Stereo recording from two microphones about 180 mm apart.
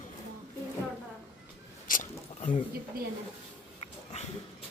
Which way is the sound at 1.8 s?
45° left (ahead or behind).